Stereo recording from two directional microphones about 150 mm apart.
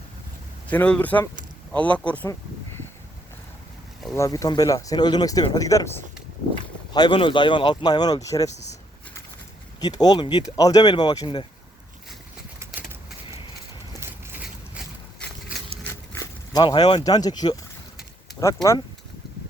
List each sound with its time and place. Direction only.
0.7 s speech: 10° left (ahead or behind)
4.1 s speech: 20° left (ahead or behind)
6.9 s speech: 30° left (ahead or behind)
9.8 s speech: 25° left (ahead or behind)
12.5 s bird: 15° right (ahead or behind)
14.0 s a sound: 15° right (ahead or behind)
15.8 s a sound: 20° left (ahead or behind)
18.3 s speech: 20° left (ahead or behind)